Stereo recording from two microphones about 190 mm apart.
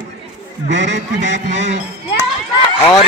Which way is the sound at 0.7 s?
70° right (ahead or behind).